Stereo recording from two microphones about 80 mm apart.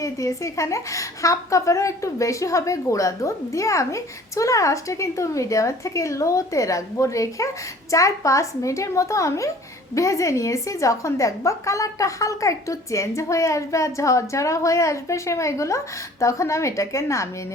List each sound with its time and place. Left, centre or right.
0.0 s a woman's voice: left